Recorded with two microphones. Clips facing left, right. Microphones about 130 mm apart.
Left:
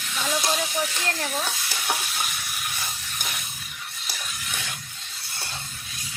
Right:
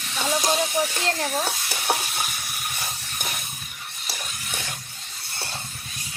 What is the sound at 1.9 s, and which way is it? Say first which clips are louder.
Stir: right 3 dB; 40° right (ahead or behind).